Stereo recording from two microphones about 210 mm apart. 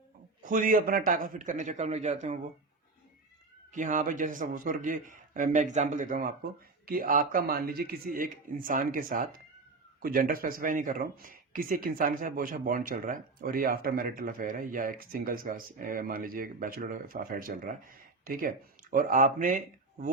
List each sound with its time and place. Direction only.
0.4 s speech: 40° right (ahead or behind)
3.7 s speech: 35° right (ahead or behind)